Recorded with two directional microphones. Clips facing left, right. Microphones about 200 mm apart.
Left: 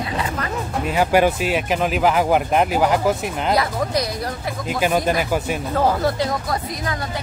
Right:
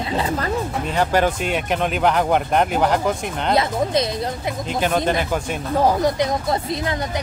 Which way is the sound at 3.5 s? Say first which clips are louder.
Right 5 dB; 25° right (ahead or behind).